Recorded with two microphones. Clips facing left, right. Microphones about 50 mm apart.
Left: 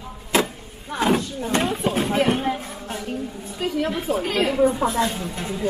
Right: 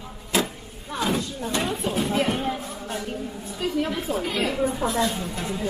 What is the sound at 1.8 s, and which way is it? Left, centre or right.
Speech, left.